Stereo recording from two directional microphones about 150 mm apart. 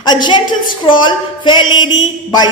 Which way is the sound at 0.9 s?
30° left (ahead or behind).